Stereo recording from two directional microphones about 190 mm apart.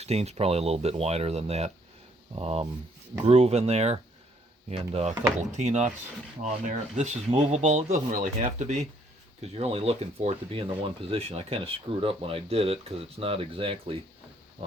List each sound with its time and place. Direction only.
0.0 s speech: 35° right (ahead or behind)